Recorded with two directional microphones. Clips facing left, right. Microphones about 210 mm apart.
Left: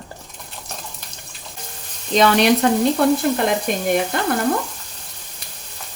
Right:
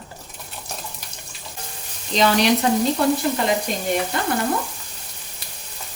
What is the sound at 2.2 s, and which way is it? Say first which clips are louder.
Frying: left 3 dB; 60° left (ahead or behind).